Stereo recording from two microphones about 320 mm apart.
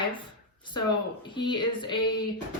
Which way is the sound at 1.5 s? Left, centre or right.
Centre.